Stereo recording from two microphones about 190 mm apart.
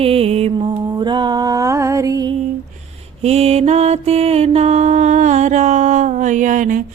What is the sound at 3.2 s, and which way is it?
Mantra, 30° right (ahead or behind).